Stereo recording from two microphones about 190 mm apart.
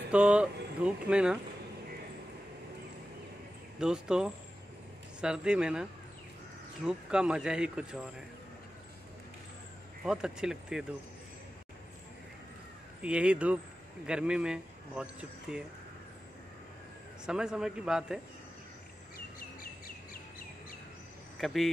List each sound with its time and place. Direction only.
0.1 s speech: 5° right (ahead or behind)
3.8 s speech: 5° right (ahead or behind)
10.0 s speech: 5° right (ahead or behind)
13.0 s speech: 5° right (ahead or behind)
17.3 s speech: 5° right (ahead or behind)
19.1 s bird vocalization: 50° left (ahead or behind)
21.4 s speech: centre (ahead or behind)